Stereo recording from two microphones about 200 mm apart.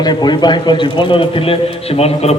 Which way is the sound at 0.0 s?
20° left (ahead or behind).